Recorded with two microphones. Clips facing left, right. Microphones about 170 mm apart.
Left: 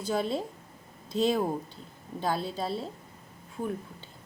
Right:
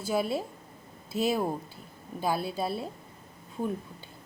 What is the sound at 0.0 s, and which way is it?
Speech, 10° right (ahead or behind).